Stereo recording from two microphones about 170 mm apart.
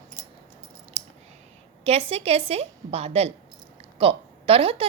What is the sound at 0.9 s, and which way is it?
Clicking, 40° right (ahead or behind).